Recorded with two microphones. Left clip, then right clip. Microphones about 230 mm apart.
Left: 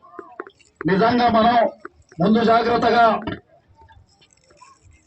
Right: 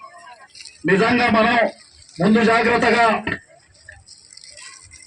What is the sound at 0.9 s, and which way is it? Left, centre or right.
A man's voice, right.